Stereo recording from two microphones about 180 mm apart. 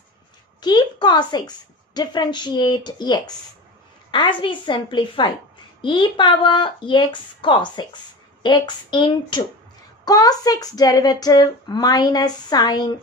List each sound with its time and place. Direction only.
0.6 s speech: 25° left (ahead or behind)